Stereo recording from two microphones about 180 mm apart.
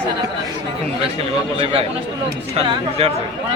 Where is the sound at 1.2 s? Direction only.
35° right (ahead or behind).